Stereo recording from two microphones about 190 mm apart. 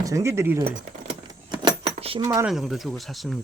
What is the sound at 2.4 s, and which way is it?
Speech, centre (ahead or behind).